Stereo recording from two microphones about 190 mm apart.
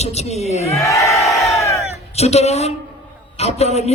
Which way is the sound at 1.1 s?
Centre (ahead or behind).